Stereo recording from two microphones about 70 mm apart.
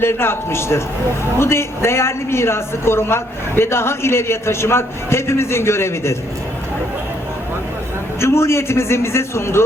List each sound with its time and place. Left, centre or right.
0.0 s a woman's voice: left
8.2 s a woman's voice: left